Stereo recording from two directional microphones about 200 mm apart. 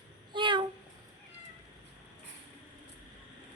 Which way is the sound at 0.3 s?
25° right (ahead or behind).